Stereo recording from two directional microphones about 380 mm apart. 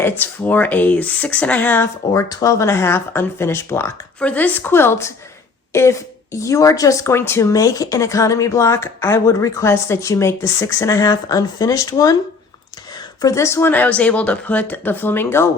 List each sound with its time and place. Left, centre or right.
0.0 s speech: centre